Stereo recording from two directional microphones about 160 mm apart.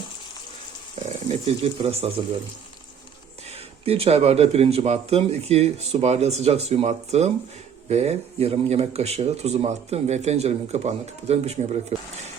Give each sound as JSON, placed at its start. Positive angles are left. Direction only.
{"t": 1.5, "sound": "speech", "side_deg": -40}
{"t": 3.5, "sound": "speech", "side_deg": -35}